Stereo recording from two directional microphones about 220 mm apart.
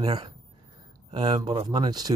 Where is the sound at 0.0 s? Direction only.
25° right (ahead or behind).